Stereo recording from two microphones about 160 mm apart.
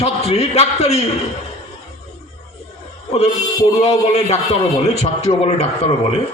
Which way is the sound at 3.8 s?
40° left (ahead or behind).